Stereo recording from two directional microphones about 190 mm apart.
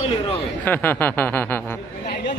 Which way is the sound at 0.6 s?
10° left (ahead or behind).